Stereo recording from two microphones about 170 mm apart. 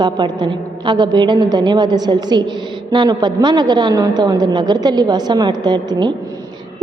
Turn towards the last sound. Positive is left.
turn(degrees=-25)  # may be behind; listen again after turning